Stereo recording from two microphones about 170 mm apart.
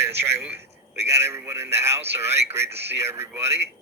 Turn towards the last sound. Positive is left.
turn(degrees=-15)  # may be behind; listen again after turning